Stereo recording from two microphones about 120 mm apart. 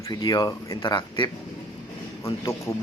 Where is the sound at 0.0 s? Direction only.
30° left (ahead or behind).